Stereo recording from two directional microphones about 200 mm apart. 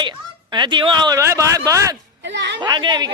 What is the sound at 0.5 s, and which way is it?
Speech, 25° right (ahead or behind).